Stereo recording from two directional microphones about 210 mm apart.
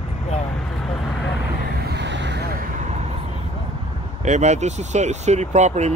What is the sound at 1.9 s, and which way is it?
Vehicle, 55° right (ahead or behind).